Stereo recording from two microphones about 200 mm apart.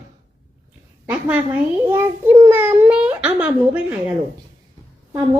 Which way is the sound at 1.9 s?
10° right (ahead or behind).